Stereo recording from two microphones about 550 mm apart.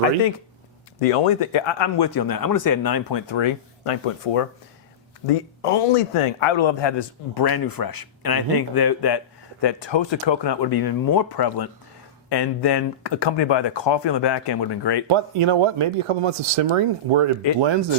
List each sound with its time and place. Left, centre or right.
0.9 s a man's voice: left
15.0 s speech: right